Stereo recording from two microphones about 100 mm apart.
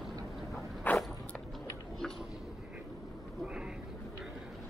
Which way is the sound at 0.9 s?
15° left (ahead or behind).